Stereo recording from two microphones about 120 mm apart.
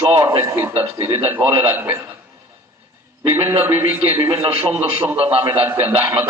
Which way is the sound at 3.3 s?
20° right (ahead or behind).